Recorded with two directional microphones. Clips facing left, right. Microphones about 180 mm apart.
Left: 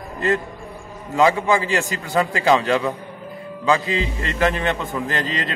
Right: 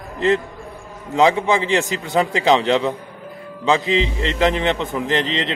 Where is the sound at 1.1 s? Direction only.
20° right (ahead or behind).